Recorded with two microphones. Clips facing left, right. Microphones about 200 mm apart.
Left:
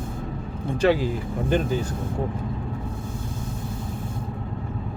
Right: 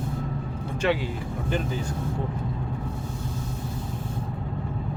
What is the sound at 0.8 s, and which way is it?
Speech, 40° left (ahead or behind).